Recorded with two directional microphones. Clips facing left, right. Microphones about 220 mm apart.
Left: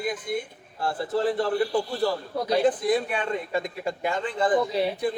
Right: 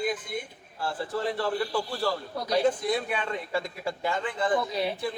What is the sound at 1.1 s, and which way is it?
A man's voice, 20° left (ahead or behind).